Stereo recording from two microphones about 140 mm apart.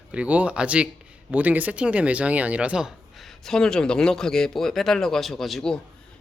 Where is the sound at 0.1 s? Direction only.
10° right (ahead or behind).